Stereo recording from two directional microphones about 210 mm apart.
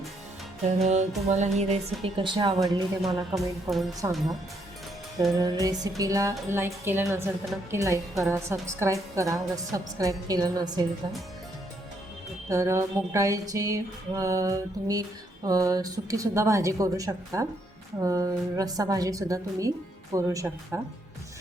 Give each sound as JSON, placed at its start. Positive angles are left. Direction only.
{"t": 0.8, "sound": "music", "side_deg": -35}
{"t": 1.3, "sound": "a woman's voice", "side_deg": -35}
{"t": 5.3, "sound": "a woman's voice", "side_deg": -15}
{"t": 12.5, "sound": "a woman's voice", "side_deg": -15}